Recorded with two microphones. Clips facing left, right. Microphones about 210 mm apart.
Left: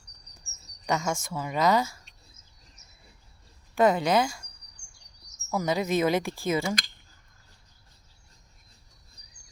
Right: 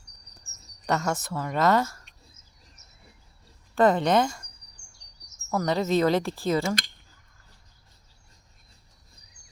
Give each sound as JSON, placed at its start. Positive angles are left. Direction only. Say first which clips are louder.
{"t": 0.3, "sound": "speech", "louder": "right 2 dB", "side_deg": 0}
{"t": 3.8, "sound": "speech", "louder": "right 2 dB", "side_deg": 10}
{"t": 5.5, "sound": "speech", "louder": "right 2 dB", "side_deg": 5}